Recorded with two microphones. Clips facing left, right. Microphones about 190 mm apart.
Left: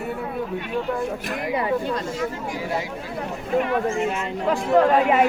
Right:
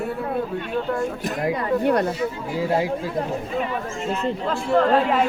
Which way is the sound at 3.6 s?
65° left (ahead or behind).